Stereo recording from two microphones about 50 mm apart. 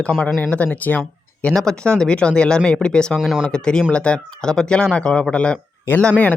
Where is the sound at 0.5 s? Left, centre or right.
Left.